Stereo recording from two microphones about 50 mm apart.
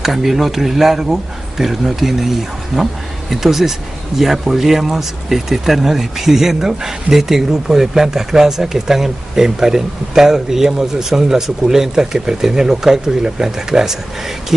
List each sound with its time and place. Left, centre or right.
0.0 s speech: centre